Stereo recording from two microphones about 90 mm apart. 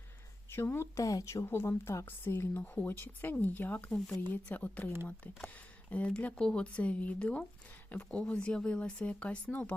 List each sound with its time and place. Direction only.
0.5 s a woman's voice: 25° left (ahead or behind)
3.9 s speech: 5° left (ahead or behind)
4.3 s a woman's voice: 20° left (ahead or behind)
6.1 s speech: 10° left (ahead or behind)